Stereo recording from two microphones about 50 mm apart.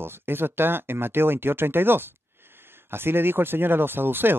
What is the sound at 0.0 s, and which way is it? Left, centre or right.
Speech, right.